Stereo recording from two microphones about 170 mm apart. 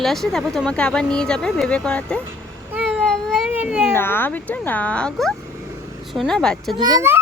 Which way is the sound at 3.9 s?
15° left (ahead or behind).